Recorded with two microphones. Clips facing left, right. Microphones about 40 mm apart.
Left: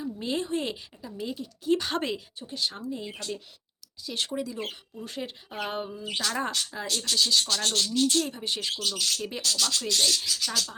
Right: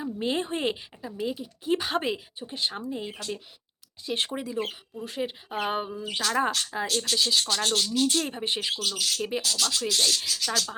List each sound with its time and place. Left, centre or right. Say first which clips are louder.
0.0 s a woman's voice: right 2 dB; right
1.1 s speech: right 3 dB; centre
2.6 s speech: right 1 dB; right
4.5 s speech: right 4 dB; centre
6.0 s speech: right 3 dB; centre
8.3 s speech: right 2 dB; right
8.8 s speech: right 1 dB; centre